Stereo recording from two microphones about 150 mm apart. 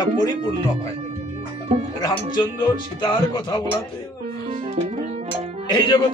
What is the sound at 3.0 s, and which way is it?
Speech, 35° left (ahead or behind).